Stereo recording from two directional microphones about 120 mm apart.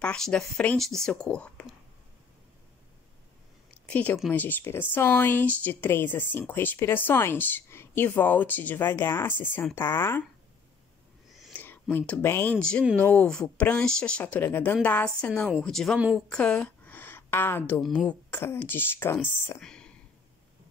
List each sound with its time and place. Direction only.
0.0 s speech: 10° left (ahead or behind)
3.8 s speech: 10° left (ahead or behind)
11.5 s a sound: 15° left (ahead or behind)
12.1 s speech: 20° left (ahead or behind)
12.5 s a woman's voice: 5° left (ahead or behind)
17.7 s speech: 5° left (ahead or behind)
18.3 s speech: 20° left (ahead or behind)
19.6 s whispering: 5° left (ahead or behind)